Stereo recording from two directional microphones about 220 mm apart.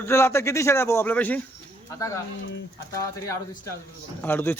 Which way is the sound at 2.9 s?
15° left (ahead or behind).